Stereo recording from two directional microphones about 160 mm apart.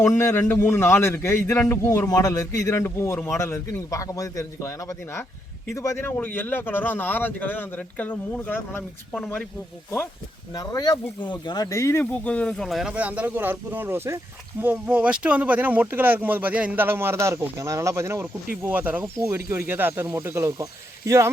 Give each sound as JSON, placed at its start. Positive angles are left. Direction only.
{"t": 0.0, "sound": "a man's voice", "side_deg": 15}
{"t": 10.5, "sound": "speech", "side_deg": 25}